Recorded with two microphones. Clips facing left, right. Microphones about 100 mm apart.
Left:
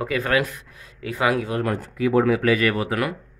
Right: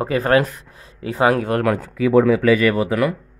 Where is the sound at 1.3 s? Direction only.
50° right (ahead or behind).